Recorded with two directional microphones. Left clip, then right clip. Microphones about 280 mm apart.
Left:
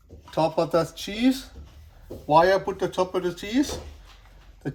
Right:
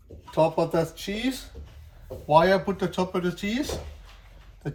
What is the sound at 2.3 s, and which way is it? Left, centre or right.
Speech, left.